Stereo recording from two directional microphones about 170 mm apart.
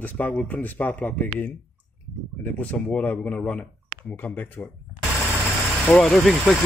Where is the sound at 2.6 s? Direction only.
10° left (ahead or behind).